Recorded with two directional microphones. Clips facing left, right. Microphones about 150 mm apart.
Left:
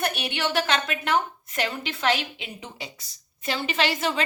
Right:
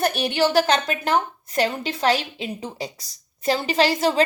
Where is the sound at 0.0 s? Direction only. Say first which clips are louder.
Right 7 dB; 35° right (ahead or behind).